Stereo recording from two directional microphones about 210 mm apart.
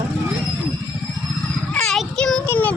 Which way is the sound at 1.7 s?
5° left (ahead or behind).